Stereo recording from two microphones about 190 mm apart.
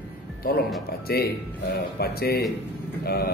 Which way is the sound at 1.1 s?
55° left (ahead or behind).